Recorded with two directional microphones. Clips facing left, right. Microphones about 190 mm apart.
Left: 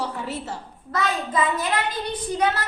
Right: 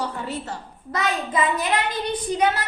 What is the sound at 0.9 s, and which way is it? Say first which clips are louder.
A child's voice: even; 15° right (ahead or behind).